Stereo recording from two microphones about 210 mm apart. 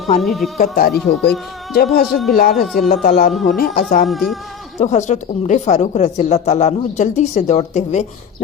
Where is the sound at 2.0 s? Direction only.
Centre (ahead or behind).